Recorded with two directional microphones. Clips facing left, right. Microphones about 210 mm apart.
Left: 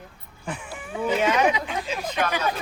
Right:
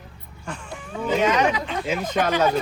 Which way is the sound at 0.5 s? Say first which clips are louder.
Even; 5° left (ahead or behind).